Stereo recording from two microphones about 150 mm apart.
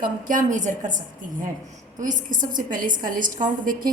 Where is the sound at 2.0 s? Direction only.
60° right (ahead or behind).